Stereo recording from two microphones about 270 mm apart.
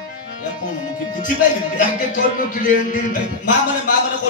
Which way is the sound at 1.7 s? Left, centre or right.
Left.